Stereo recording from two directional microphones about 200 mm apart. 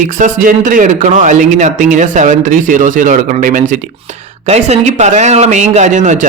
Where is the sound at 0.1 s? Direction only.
40° right (ahead or behind).